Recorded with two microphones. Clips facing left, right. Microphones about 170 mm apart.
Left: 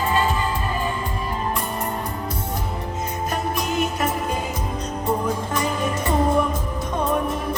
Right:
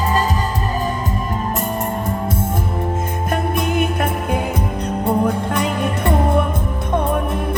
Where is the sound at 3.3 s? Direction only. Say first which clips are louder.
Right 6 dB; 55° right (ahead or behind).